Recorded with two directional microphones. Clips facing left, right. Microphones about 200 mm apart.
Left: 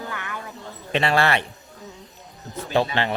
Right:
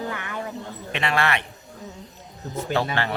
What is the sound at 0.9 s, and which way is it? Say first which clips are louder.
Speech: left 4 dB; 35° left (ahead or behind).